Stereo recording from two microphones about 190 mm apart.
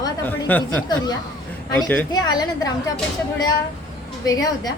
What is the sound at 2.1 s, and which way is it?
Speech, 20° left (ahead or behind).